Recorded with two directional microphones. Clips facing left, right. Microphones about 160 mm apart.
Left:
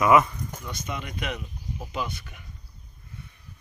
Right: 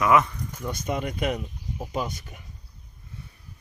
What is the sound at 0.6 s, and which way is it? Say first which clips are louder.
Speech: right 9 dB; 45° right (ahead or behind).